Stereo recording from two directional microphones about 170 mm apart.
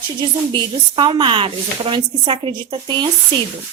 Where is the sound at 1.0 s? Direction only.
30° right (ahead or behind).